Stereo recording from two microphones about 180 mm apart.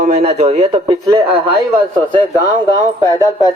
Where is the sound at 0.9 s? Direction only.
25° right (ahead or behind).